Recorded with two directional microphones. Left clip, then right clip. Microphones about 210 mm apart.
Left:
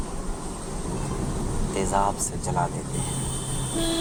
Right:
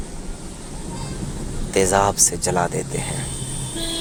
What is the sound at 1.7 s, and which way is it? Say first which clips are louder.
Speech: right 8 dB; 45° right (ahead or behind).